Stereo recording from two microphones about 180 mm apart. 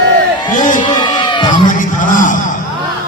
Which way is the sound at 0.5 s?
45° left (ahead or behind).